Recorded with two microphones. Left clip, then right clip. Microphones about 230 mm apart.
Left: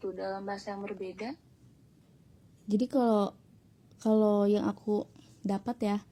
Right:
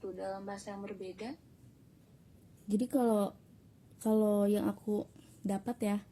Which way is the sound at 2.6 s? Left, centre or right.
Centre.